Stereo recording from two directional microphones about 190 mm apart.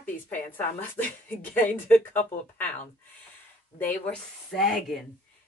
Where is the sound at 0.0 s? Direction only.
10° left (ahead or behind).